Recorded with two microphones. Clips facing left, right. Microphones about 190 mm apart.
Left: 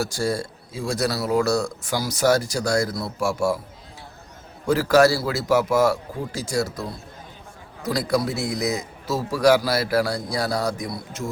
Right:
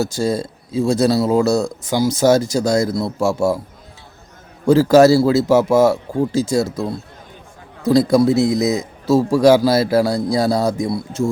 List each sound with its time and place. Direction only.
0.0 s speech: 20° right (ahead or behind)
4.6 s speech: 25° right (ahead or behind)